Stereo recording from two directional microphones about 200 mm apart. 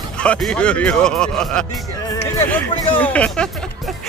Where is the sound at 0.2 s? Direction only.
5° left (ahead or behind).